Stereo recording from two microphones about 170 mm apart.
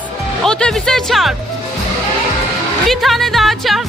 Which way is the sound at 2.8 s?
Centre (ahead or behind).